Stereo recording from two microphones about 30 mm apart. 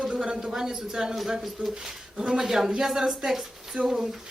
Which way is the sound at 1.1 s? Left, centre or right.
Centre.